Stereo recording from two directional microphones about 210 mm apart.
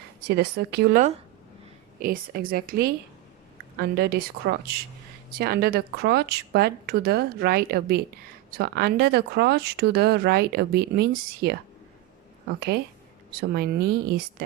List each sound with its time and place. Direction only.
0.3 s speech: 50° right (ahead or behind)
12.5 s speech: 50° right (ahead or behind)